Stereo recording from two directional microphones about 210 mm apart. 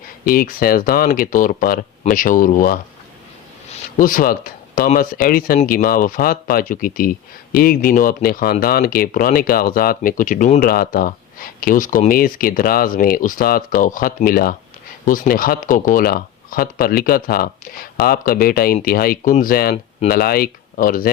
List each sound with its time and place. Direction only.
0.3 s speech: 45° left (ahead or behind)
3.9 s speech: 40° left (ahead or behind)